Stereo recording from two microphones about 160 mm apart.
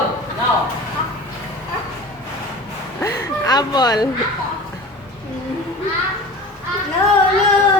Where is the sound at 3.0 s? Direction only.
25° left (ahead or behind).